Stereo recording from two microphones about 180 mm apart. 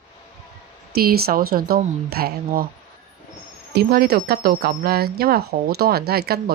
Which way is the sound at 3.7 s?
60° right (ahead or behind).